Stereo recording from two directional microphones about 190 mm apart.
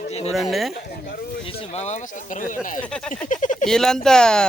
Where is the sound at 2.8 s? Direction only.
5° left (ahead or behind).